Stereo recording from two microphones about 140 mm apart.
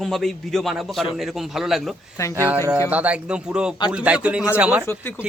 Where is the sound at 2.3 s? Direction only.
15° right (ahead or behind).